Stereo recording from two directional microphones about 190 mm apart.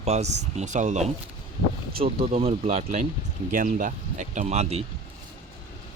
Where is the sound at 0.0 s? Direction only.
35° right (ahead or behind).